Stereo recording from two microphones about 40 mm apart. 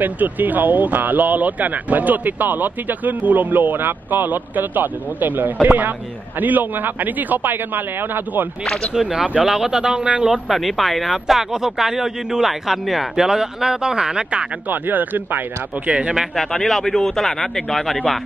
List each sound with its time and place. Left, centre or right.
0.0 s speech: right
9.0 s speech: right
9.4 s speech: centre
10.5 s speech: centre
13.1 s speech: centre
14.7 s speech: right
15.9 s speech: right
16.3 s speech: centre